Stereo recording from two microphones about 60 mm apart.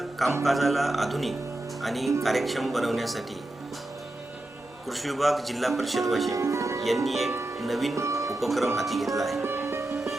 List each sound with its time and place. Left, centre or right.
0.4 s speech: centre
4.9 s speech: centre
6.3 s music: right
6.8 s speech: centre
7.9 s speech: right
8.3 s speech: centre
9.4 s music: right